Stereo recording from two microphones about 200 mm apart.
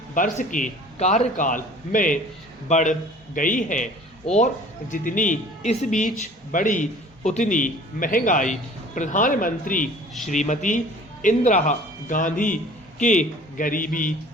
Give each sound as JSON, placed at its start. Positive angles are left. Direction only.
{"t": 0.1, "sound": "a man's voice", "side_deg": 40}
{"t": 4.9, "sound": "a man's voice", "side_deg": 40}